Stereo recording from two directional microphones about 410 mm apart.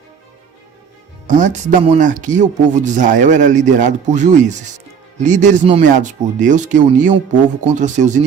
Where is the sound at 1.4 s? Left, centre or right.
Centre.